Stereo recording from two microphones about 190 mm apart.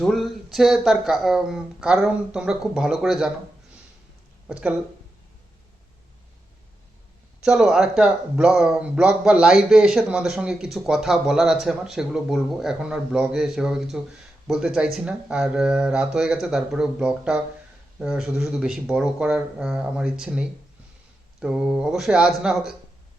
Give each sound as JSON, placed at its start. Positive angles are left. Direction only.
{"t": 0.0, "sound": "speech", "side_deg": 0}
{"t": 7.4, "sound": "speech", "side_deg": -5}